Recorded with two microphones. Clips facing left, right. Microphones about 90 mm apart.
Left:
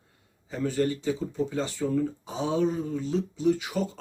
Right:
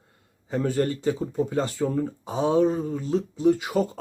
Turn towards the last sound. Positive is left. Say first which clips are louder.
# right 4 dB
turn(degrees=-40)  # may be behind; listen again after turning